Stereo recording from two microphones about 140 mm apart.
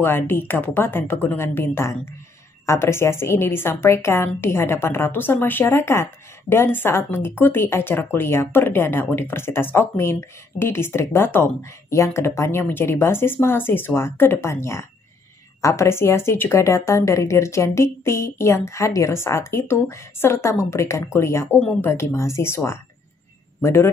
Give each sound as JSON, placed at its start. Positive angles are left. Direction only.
{"t": 0.0, "sound": "speech", "side_deg": 15}
{"t": 21.5, "sound": "speech", "side_deg": 10}
{"t": 21.9, "sound": "speech", "side_deg": 20}